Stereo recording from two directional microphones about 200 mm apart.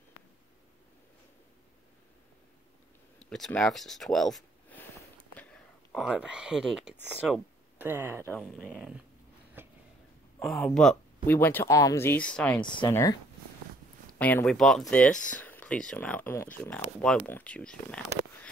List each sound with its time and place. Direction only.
3.2 s speech: 5° left (ahead or behind)
5.3 s a sound: 5° left (ahead or behind)
7.1 s speech: 5° right (ahead or behind)
8.3 s speech: centre (ahead or behind)
9.6 s a sound: 10° right (ahead or behind)
10.4 s speech: centre (ahead or behind)
12.5 s speech: 25° left (ahead or behind); by 18.0 s 5° left (ahead or behind)